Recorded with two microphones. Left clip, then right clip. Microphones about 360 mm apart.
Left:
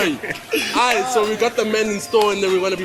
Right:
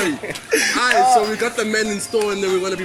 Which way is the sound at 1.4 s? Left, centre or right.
Centre.